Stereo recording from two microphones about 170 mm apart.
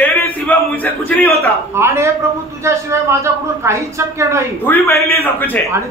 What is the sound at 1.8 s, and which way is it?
A woman's voice, 15° right (ahead or behind).